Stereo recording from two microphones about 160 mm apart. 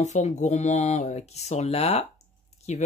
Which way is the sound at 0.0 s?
45° left (ahead or behind).